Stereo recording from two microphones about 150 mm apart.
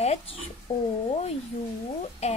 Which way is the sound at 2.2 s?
45° left (ahead or behind).